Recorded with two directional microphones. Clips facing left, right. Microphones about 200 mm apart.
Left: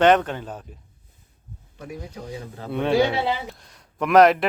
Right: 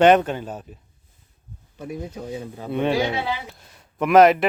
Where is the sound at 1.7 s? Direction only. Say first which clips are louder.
Right 4 dB; 25° right (ahead or behind).